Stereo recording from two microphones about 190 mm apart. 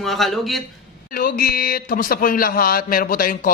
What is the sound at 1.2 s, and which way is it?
A man's voice, 50° left (ahead or behind).